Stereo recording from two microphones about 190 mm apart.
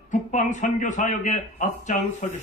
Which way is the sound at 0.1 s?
40° left (ahead or behind).